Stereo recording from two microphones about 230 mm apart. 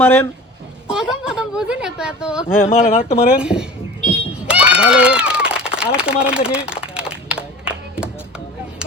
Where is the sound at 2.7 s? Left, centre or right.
Left.